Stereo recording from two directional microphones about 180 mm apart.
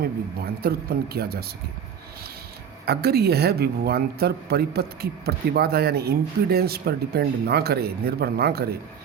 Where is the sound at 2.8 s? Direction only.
60° right (ahead or behind).